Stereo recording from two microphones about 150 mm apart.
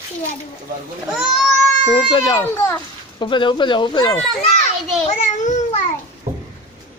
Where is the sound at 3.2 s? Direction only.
30° left (ahead or behind).